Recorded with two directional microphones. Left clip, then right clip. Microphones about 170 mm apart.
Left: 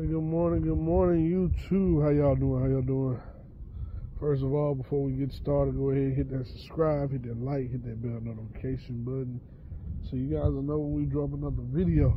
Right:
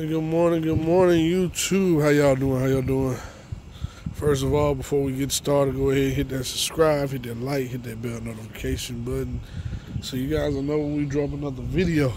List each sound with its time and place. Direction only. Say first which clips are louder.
0.0 s speech: right 7 dB; 20° right (ahead or behind)
4.2 s speech: right 7 dB; 20° right (ahead or behind)